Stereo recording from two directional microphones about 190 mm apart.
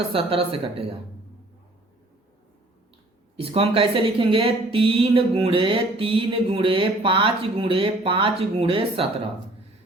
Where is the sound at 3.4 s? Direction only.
30° right (ahead or behind).